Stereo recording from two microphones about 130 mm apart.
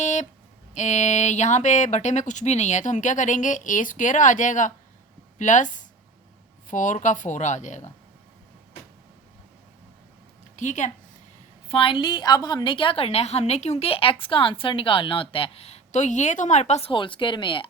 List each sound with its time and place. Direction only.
0.0 s a sound: 65° left (ahead or behind)
0.7 s speech: 65° left (ahead or behind)
10.6 s speech: 70° left (ahead or behind)
11.7 s a woman's voice: 40° left (ahead or behind); by 16.9 s 60° left (ahead or behind)
16.9 s speech: 40° left (ahead or behind)